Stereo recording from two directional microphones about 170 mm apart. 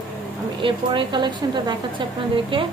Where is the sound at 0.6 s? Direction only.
30° right (ahead or behind).